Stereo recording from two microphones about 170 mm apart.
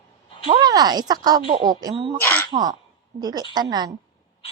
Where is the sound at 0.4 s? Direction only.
35° right (ahead or behind).